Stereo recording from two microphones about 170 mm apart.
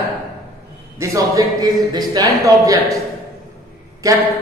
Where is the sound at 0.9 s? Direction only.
20° right (ahead or behind).